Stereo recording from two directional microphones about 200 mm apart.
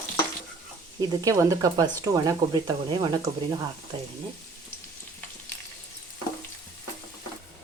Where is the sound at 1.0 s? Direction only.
20° right (ahead or behind).